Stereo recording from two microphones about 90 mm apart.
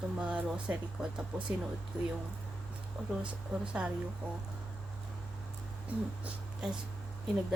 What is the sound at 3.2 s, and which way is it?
Speech, 10° right (ahead or behind).